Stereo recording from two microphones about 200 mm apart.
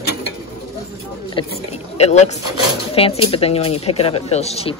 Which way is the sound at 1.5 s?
30° left (ahead or behind).